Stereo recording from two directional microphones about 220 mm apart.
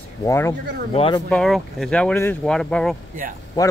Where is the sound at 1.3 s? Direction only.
Centre (ahead or behind).